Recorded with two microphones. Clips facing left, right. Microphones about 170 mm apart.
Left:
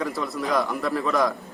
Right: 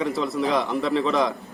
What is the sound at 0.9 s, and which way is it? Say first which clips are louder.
Speech: right 1 dB; 20° right (ahead or behind).